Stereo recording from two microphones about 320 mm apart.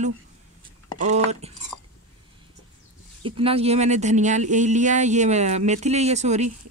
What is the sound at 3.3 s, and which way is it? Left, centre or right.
Speech, centre.